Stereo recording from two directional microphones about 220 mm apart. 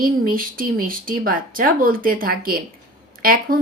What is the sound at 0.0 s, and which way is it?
Speech, 40° right (ahead or behind).